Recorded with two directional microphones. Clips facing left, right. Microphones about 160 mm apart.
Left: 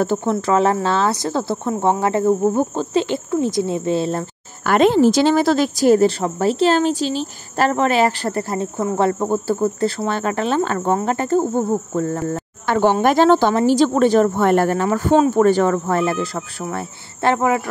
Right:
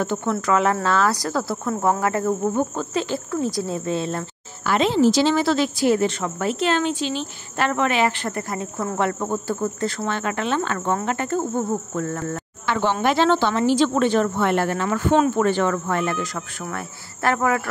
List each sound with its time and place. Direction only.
0.0 s a woman's voice: 35° left (ahead or behind)
4.6 s a woman's voice: 50° left (ahead or behind); by 12.4 s 30° left (ahead or behind)
12.6 s a woman's voice: 45° left (ahead or behind); by 17.6 s 20° left (ahead or behind)